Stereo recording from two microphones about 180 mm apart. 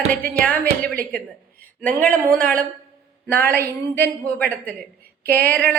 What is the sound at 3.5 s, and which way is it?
A woman's voice, 10° left (ahead or behind).